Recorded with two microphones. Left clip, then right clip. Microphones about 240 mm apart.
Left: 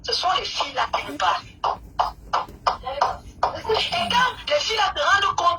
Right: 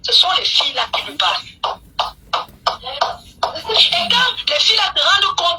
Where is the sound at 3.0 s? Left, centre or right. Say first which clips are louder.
Right 2 dB; right.